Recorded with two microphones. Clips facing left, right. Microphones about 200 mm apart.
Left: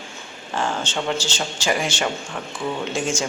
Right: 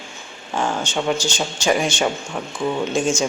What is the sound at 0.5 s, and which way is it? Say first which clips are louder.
Speech: right 2 dB; 10° right (ahead or behind).